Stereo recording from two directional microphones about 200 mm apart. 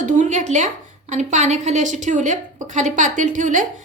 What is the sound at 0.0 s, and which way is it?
A woman's voice, 40° right (ahead or behind).